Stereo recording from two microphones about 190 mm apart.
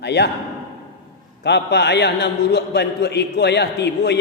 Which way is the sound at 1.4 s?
60° left (ahead or behind).